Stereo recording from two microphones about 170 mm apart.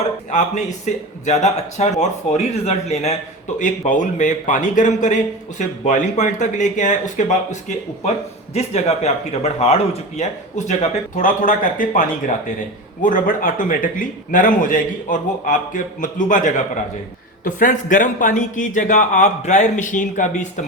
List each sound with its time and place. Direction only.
0.3 s a man's voice: 45° left (ahead or behind)